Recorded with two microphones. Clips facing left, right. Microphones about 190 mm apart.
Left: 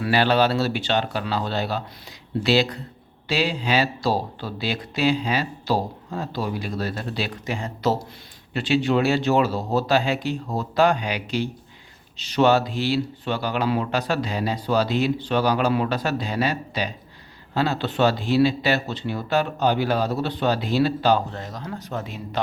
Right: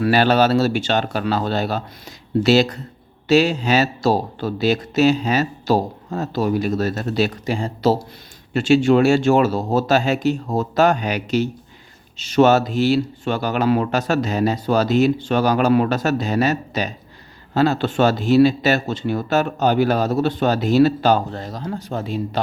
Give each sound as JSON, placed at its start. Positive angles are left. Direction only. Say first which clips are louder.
{"t": 0.0, "sound": "speech", "louder": "right 4 dB", "side_deg": -45}
{"t": 8.5, "sound": "speech", "louder": "right 6 dB", "side_deg": -45}